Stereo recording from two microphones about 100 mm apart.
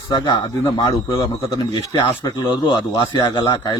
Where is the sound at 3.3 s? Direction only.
55° left (ahead or behind).